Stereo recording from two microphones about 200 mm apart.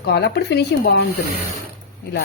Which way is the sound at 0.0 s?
55° left (ahead or behind).